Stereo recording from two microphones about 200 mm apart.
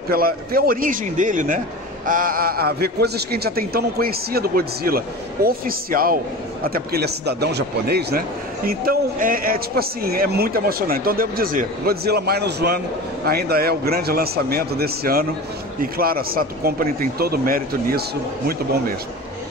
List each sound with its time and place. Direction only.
0.1 s a man's voice: 50° right (ahead or behind)